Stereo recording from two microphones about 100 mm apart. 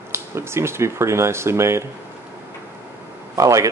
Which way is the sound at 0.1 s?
25° right (ahead or behind).